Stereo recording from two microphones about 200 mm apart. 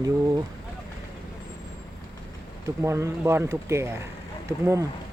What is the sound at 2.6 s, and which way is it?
Speech, 15° right (ahead or behind).